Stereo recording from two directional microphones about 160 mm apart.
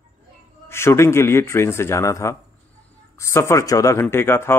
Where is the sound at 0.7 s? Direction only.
15° left (ahead or behind).